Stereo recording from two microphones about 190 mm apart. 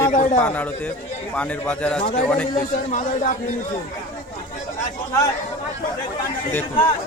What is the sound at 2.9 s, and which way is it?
Speech, 45° left (ahead or behind).